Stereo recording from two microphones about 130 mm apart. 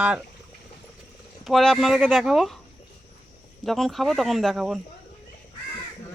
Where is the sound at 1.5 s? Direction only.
Centre (ahead or behind).